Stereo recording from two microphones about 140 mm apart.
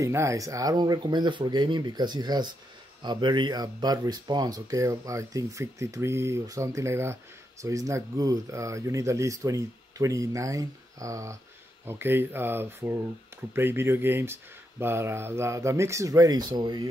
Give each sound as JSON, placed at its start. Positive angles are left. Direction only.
{"t": 0.0, "sound": "speech", "side_deg": -20}